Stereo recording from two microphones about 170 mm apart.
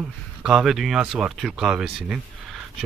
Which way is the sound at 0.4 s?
5° right (ahead or behind).